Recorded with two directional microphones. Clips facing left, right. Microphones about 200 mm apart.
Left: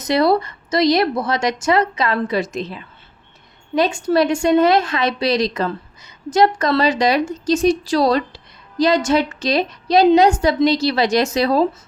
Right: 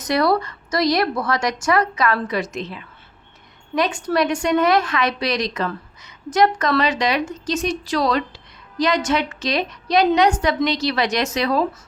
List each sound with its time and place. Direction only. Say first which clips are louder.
0.0 s a woman's voice: left 3 dB; 25° left (ahead or behind)